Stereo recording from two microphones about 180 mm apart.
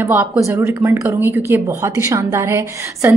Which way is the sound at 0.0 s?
15° right (ahead or behind).